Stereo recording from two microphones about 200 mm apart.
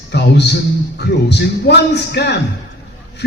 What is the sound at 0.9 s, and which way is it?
A man's voice, 55° left (ahead or behind).